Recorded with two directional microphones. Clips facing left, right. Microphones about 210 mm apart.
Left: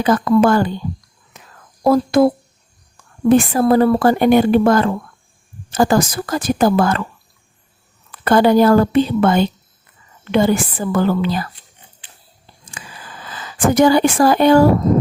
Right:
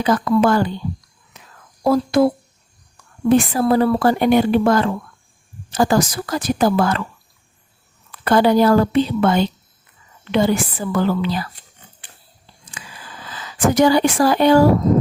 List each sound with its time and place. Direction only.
0.0 s a woman's voice: 50° left (ahead or behind)
1.8 s a woman's voice: 50° left (ahead or behind)
3.2 s a woman's voice: 50° left (ahead or behind)
8.2 s a woman's voice: 50° left (ahead or behind)
12.8 s a sound: 50° left (ahead or behind)
13.3 s speech: 50° left (ahead or behind)